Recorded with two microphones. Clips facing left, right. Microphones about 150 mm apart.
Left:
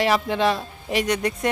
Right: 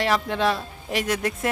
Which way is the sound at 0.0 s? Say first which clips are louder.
Left 2 dB; centre (ahead or behind).